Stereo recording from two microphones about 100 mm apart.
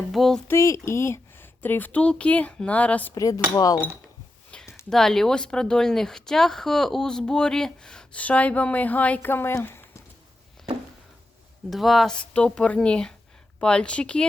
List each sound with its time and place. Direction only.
0.1 s a sound: centre (ahead or behind)
0.4 s speech: 30° left (ahead or behind)
3.2 s cutlery: 35° left (ahead or behind)
4.5 s a sound: 10° left (ahead or behind)
4.9 s speech: 5° left (ahead or behind); by 10.0 s 25° left (ahead or behind)
11.7 s speech: centre (ahead or behind)